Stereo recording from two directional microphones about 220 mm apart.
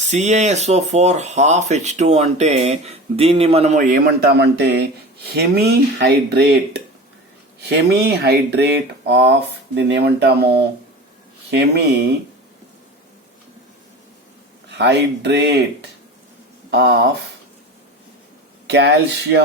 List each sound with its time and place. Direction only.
0.1 s speech: 30° right (ahead or behind); by 10.5 s 50° right (ahead or behind)
11.5 s speech: 50° right (ahead or behind)
14.7 s speech: 50° right (ahead or behind)
16.7 s speech: 50° right (ahead or behind)
18.7 s speech: 50° right (ahead or behind)